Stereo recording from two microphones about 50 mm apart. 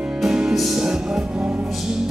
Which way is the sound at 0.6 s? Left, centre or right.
Centre.